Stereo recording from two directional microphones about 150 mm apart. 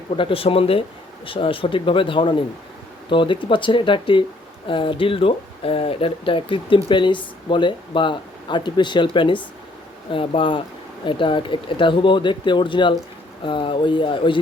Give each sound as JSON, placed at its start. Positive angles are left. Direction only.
{"t": 0.2, "sound": "speech", "side_deg": 35}